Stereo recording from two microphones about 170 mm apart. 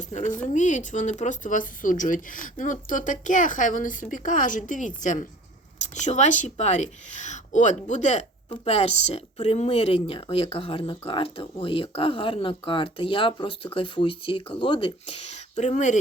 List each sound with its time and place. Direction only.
0.0 s speech: 45° left (ahead or behind)